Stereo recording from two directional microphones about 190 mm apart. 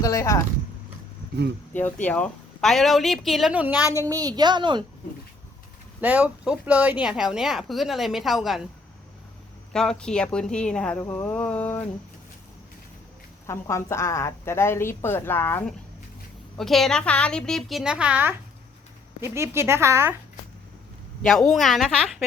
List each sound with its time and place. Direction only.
0.0 s speech: 15° left (ahead or behind)
2.0 s a woman's voice: 5° left (ahead or behind)
3.8 s a woman's voice: 15° left (ahead or behind)
4.1 s a woman's voice: 20° right (ahead or behind)
6.0 s a woman's voice: 5° right (ahead or behind)
9.7 s a woman's voice: 5° left (ahead or behind)
13.5 s a woman's voice: 15° left (ahead or behind); by 20.1 s 15° right (ahead or behind)
21.2 s a woman's voice: 5° left (ahead or behind)